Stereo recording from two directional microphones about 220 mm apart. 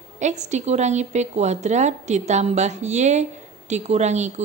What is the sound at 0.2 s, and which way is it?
A woman's voice, 30° right (ahead or behind).